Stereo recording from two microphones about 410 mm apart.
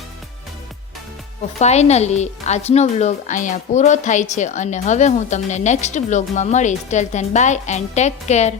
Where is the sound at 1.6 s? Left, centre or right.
Centre.